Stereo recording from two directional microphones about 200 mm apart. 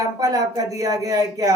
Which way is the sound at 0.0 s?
20° right (ahead or behind).